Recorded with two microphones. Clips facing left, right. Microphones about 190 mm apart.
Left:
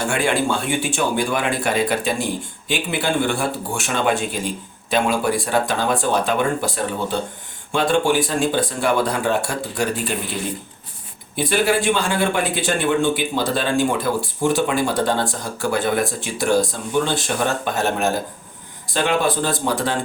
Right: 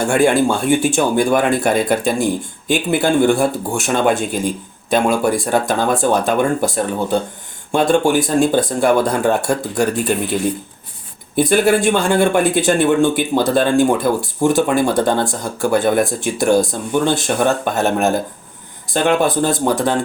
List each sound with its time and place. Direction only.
0.0 s speech: 45° right (ahead or behind)
11.3 s speech: 45° right (ahead or behind)